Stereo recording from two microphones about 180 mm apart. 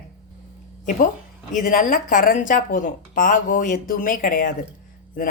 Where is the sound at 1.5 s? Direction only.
45° left (ahead or behind).